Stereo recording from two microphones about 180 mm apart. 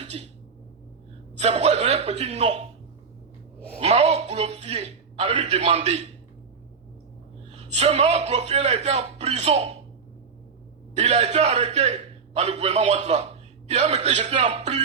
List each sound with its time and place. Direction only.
0.0 s a sound: 35° right (ahead or behind)
1.4 s a man's voice: 35° right (ahead or behind)
3.8 s a man's voice: 35° right (ahead or behind)
7.5 s a man's voice: 40° right (ahead or behind)
10.9 s a man's voice: 40° right (ahead or behind)